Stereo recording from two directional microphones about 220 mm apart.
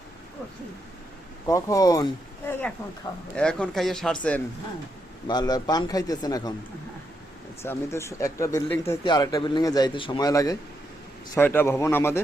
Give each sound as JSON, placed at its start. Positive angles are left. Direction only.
{"t": 1.5, "sound": "speech", "side_deg": 15}
{"t": 5.3, "sound": "speech", "side_deg": 20}
{"t": 7.6, "sound": "speech", "side_deg": 10}